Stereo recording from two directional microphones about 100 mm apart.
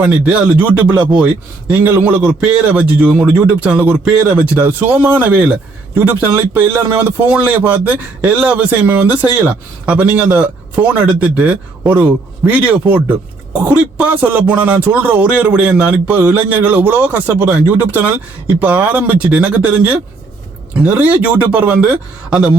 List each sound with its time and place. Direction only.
0.0 s a man's voice: 15° right (ahead or behind)